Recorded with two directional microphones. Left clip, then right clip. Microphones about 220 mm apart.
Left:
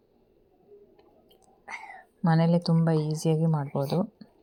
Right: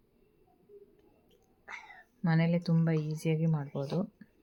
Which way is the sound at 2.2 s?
15° left (ahead or behind).